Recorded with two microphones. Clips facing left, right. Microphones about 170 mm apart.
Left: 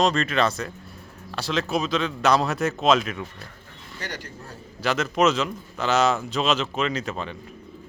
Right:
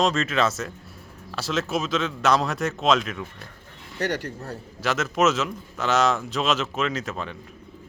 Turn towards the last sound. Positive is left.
turn(degrees=0)  # may be behind; listen again after turning